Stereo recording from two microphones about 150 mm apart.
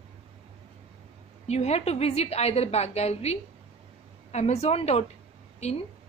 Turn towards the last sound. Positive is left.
turn(degrees=50)  # may be behind; listen again after turning